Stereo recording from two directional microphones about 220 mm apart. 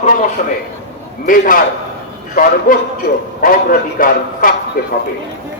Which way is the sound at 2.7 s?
40° left (ahead or behind).